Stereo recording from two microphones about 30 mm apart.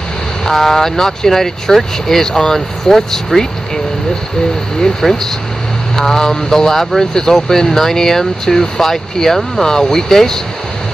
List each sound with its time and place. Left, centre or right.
0.5 s speech: centre
5.0 s speech: centre